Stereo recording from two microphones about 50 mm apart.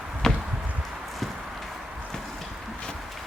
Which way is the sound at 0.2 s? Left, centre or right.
Centre.